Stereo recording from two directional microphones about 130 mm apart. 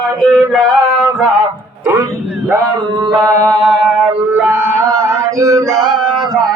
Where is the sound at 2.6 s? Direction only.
35° right (ahead or behind).